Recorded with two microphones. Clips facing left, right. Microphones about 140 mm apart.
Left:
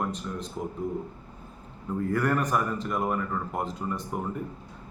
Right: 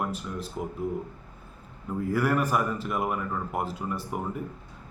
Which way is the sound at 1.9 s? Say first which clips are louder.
Even; 5° right (ahead or behind).